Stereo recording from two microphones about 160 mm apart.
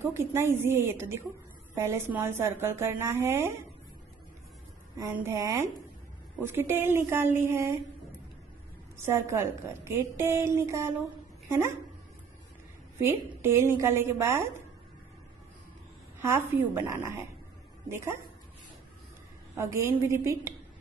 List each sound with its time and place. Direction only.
0.0 s a woman's voice: 15° right (ahead or behind)
4.9 s a woman's voice: 15° right (ahead or behind)
8.9 s a woman's voice: 15° right (ahead or behind)
13.4 s a woman's voice: 15° right (ahead or behind)
16.2 s a woman's voice: 15° right (ahead or behind)
19.5 s a woman's voice: 15° right (ahead or behind)